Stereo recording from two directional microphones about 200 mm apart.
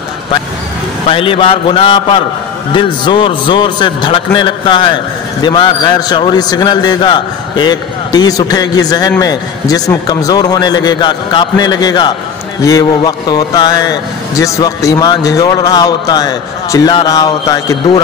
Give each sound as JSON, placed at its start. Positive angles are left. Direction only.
{"t": 1.0, "sound": "a man's voice", "side_deg": 25}